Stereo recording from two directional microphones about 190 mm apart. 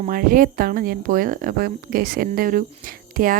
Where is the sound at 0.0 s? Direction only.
50° right (ahead or behind).